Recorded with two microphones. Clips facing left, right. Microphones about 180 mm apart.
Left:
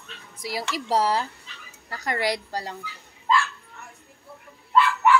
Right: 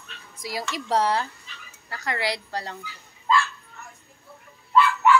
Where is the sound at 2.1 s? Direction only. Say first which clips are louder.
Left 2 dB; 45° left (ahead or behind).